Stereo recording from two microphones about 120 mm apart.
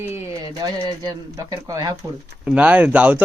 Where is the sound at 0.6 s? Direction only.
35° right (ahead or behind).